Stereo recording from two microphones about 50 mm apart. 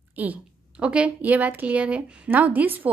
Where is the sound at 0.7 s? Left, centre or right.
Right.